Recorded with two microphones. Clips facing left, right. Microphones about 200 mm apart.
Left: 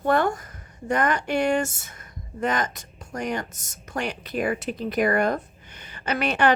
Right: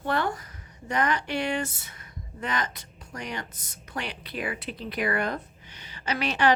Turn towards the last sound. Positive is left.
turn(degrees=55)  # may be behind; listen again after turning